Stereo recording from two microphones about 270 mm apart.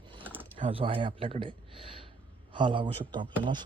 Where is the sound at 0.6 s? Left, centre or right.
Centre.